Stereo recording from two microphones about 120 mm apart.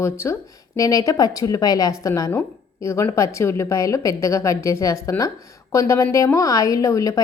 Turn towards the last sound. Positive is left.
turn(degrees=25)  # may be behind; listen again after turning